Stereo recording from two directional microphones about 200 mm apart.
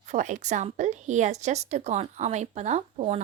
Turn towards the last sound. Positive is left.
turn(degrees=-35)  # may be behind; listen again after turning